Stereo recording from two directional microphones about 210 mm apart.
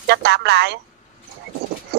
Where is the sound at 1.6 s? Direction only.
50° right (ahead or behind).